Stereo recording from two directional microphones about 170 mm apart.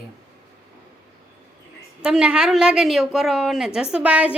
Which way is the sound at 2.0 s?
5° right (ahead or behind).